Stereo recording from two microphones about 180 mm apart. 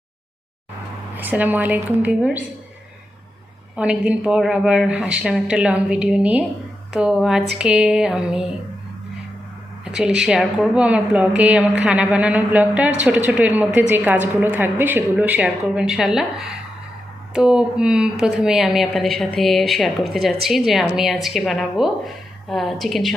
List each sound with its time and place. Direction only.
1.1 s a woman's voice: 10° right (ahead or behind)
3.8 s a woman's voice: 5° right (ahead or behind)
9.8 s a woman's voice: 5° right (ahead or behind)